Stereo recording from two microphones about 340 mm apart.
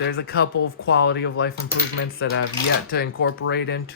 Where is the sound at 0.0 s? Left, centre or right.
Left.